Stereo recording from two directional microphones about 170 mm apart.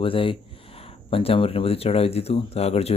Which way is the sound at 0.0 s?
30° left (ahead or behind).